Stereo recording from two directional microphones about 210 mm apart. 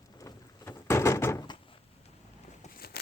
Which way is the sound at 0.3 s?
15° left (ahead or behind).